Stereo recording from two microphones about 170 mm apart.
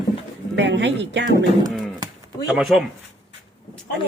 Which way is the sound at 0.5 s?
90° right.